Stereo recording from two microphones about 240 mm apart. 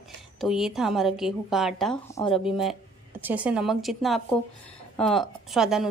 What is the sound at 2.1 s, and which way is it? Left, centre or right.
Speech, left.